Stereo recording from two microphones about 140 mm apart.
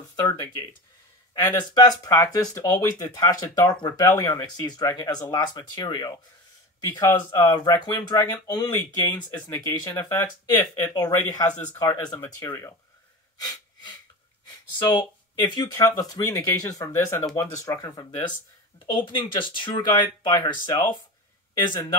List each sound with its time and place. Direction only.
0.1 s speech: 30° left (ahead or behind)
1.6 s speech: 30° left (ahead or behind)
6.8 s speech: 20° left (ahead or behind)
12.2 s speech: 15° left (ahead or behind)
13.4 s wheeze: 30° left (ahead or behind)
14.8 s speech: 30° left (ahead or behind)
18.9 s speech: 35° left (ahead or behind)